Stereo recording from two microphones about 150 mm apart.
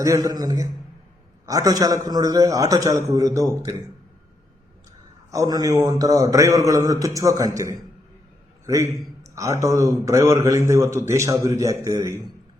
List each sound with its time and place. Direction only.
0.0 s a man's voice: 20° right (ahead or behind)
5.3 s a man's voice: 25° right (ahead or behind)